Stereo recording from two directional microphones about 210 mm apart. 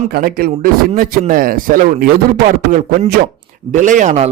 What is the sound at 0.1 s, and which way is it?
A man's voice, 45° right (ahead or behind).